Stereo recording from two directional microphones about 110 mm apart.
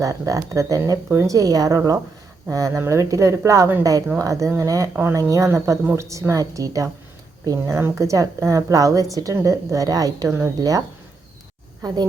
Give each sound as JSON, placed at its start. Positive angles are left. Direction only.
{"t": 0.0, "sound": "a woman's voice", "side_deg": -30}